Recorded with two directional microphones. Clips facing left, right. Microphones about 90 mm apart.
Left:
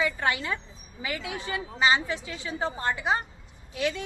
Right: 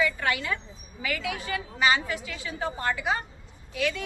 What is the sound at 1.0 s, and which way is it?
A woman's voice, 25° left (ahead or behind).